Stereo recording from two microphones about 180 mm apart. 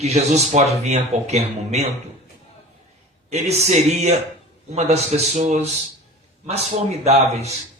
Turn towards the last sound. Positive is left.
turn(degrees=-35)  # may be behind; listen again after turning